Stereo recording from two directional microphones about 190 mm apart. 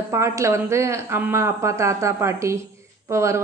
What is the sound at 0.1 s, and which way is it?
A woman's voice, 15° right (ahead or behind).